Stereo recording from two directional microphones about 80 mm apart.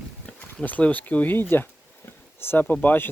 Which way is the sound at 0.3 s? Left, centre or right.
Centre.